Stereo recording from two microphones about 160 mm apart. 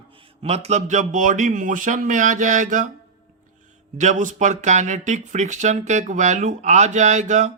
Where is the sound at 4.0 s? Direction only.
50° right (ahead or behind).